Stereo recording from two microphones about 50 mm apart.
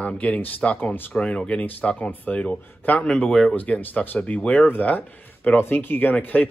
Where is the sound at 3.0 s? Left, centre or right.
Centre.